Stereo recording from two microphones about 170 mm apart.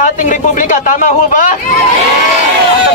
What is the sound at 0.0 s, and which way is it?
A man's voice, 50° left (ahead or behind).